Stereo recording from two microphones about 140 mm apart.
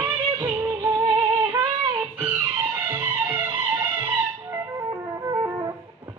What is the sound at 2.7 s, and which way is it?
Music, 15° right (ahead or behind).